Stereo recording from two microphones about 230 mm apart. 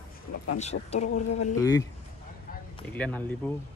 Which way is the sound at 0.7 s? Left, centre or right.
Left.